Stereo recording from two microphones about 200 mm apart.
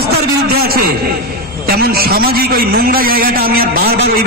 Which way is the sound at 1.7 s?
50° right (ahead or behind).